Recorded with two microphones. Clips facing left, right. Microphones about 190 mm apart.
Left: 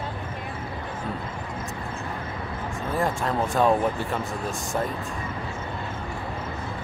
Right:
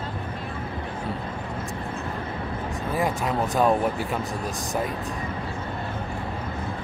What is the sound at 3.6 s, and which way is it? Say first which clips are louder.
Speech: even; 5° right (ahead or behind).